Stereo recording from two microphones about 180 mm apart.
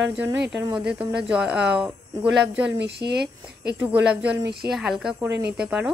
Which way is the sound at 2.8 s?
65° right (ahead or behind).